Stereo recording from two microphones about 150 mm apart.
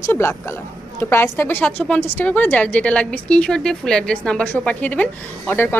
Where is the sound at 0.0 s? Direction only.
15° left (ahead or behind).